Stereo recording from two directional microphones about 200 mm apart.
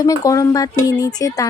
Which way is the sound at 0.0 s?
20° left (ahead or behind).